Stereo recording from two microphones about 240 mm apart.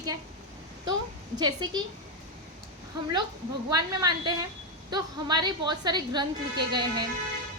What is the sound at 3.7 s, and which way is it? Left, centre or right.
A woman's voice, centre.